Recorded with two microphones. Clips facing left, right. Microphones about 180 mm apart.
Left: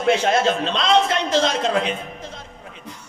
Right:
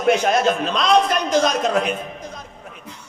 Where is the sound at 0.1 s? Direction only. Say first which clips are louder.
Right 1 dB; 25° left (ahead or behind).